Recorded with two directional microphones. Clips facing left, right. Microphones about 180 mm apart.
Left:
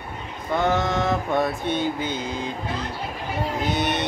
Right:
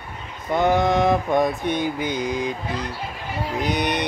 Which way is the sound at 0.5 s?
15° right (ahead or behind).